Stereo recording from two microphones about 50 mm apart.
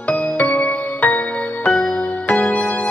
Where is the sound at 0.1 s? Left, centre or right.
Left.